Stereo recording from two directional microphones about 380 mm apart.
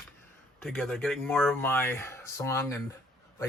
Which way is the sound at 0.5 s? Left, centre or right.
Centre.